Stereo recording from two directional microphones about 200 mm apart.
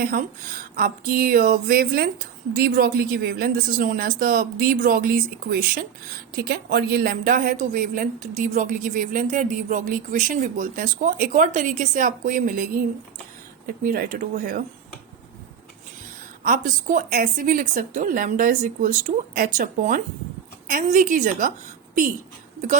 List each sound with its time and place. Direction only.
0.0 s a woman's voice: 45° right (ahead or behind)
16.4 s a woman's voice: 40° right (ahead or behind)